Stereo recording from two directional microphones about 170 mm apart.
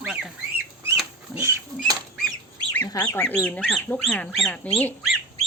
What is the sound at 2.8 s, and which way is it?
Speech, 20° left (ahead or behind).